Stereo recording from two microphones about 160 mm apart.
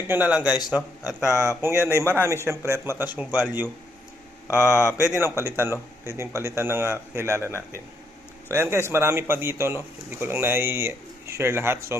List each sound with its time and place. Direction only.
0.1 s speech: 10° right (ahead or behind)
1.0 s speech: 15° left (ahead or behind)
1.8 s speech: 15° right (ahead or behind)
4.4 s speech: 15° left (ahead or behind)
5.4 s speech: 15° right (ahead or behind)